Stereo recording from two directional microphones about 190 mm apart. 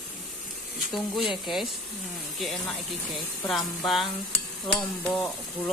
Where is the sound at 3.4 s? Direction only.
Centre (ahead or behind).